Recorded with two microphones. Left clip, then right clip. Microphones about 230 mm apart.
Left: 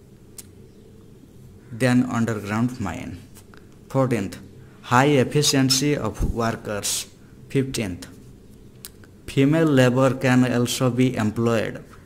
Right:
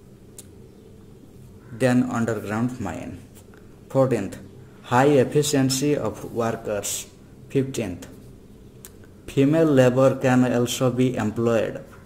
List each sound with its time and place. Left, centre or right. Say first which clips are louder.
1.8 s speech: even; left
9.3 s a man's voice: right 1 dB; left